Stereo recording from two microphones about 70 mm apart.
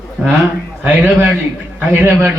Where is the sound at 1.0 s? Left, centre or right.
Right.